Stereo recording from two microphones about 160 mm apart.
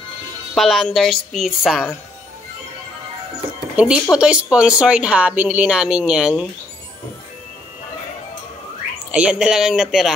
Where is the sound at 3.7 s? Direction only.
5° right (ahead or behind).